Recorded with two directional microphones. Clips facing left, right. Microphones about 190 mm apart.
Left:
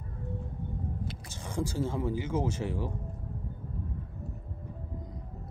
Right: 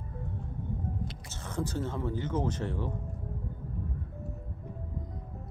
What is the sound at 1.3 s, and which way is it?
Speech, 10° left (ahead or behind).